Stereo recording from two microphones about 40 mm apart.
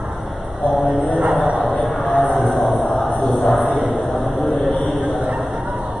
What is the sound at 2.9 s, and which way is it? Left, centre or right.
Music, centre.